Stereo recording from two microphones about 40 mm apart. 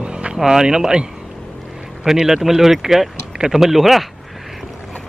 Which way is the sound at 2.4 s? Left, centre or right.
Centre.